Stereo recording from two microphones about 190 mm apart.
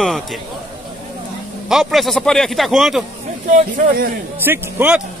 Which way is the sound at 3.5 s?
45° right (ahead or behind).